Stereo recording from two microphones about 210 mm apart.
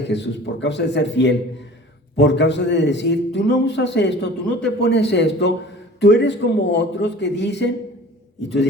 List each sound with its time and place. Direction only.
0.0 s a man's voice: 55° left (ahead or behind)